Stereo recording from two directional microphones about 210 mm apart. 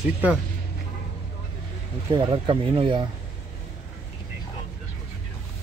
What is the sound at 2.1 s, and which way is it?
Speech, 20° right (ahead or behind).